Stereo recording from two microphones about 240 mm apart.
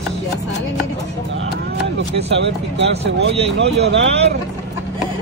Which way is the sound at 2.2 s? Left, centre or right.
Right.